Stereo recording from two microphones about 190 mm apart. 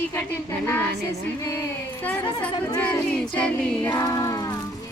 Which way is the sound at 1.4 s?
15° left (ahead or behind).